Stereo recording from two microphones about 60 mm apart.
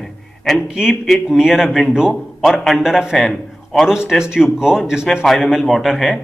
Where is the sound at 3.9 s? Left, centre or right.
Centre.